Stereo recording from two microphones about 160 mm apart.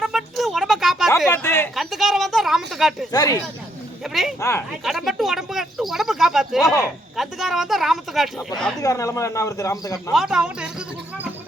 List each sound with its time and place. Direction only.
0.0 s a sound: centre (ahead or behind)
1.3 s a sound: 15° left (ahead or behind)
1.7 s a woman's voice: centre (ahead or behind)
3.1 s speech: 25° left (ahead or behind)
4.0 s speech: centre (ahead or behind)
4.4 s speech: 20° left (ahead or behind)
4.8 s speech: centre (ahead or behind)
8.8 s speech: 20° left (ahead or behind)
10.1 s speech: 5° right (ahead or behind)